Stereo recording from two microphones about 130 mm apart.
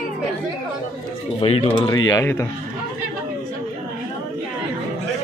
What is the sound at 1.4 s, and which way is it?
Speech, 45° left (ahead or behind).